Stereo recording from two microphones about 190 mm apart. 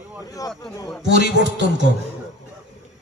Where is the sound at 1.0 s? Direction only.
70° right (ahead or behind).